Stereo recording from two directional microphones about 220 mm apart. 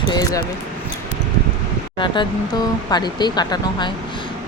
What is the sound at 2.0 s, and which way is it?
Speech, 20° left (ahead or behind).